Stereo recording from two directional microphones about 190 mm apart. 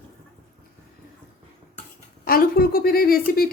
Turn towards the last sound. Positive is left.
turn(degrees=50)  # may be behind; listen again after turning